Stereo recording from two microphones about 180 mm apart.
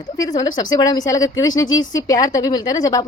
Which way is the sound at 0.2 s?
20° left (ahead or behind).